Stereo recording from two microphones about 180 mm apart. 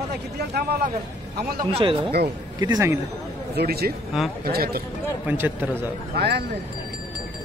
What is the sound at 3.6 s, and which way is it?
Speech, 60° right (ahead or behind).